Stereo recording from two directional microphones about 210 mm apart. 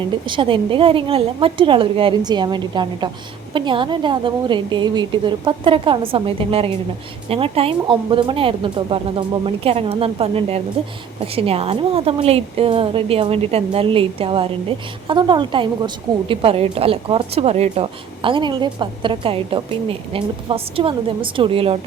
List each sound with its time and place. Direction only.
0.3 s a woman's voice: 25° right (ahead or behind)